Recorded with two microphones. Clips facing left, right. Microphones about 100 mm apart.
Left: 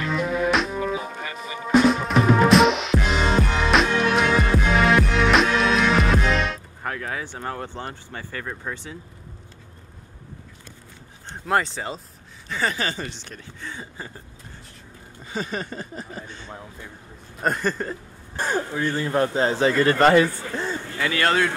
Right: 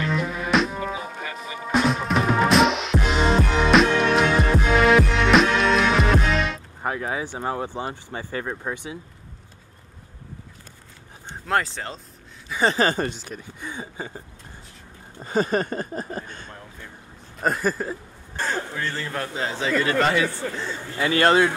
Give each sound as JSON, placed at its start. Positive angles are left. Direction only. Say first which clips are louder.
{"t": 0.0, "sound": "music", "louder": "left 3 dB", "side_deg": 0}
{"t": 6.8, "sound": "speech", "louder": "right 4 dB", "side_deg": -15}
{"t": 11.4, "sound": "speech", "louder": "left 1 dB", "side_deg": 0}
{"t": 12.7, "sound": "speech", "louder": "right 7 dB", "side_deg": -45}
{"t": 13.2, "sound": "speech", "louder": "right 3 dB", "side_deg": -10}
{"t": 15.2, "sound": "speech", "louder": "right 7 dB", "side_deg": -45}
{"t": 17.4, "sound": "speech", "louder": "right 1 dB", "side_deg": 0}
{"t": 18.3, "sound": "speech", "louder": "left 2 dB", "side_deg": 15}
{"t": 19.1, "sound": "speech", "louder": "left 10 dB", "side_deg": 35}
{"t": 21.0, "sound": "a man's voice", "louder": "right 4 dB", "side_deg": -25}